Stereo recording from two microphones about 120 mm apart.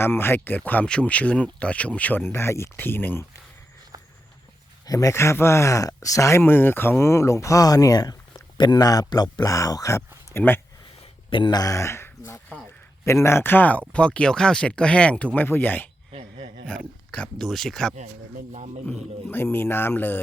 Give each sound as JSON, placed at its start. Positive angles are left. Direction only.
{"t": 0.0, "sound": "speech", "side_deg": 20}
{"t": 4.9, "sound": "a man's voice", "side_deg": 30}
{"t": 11.3, "sound": "speech", "side_deg": 40}
{"t": 18.5, "sound": "speech", "side_deg": -70}
{"t": 18.9, "sound": "speech", "side_deg": 15}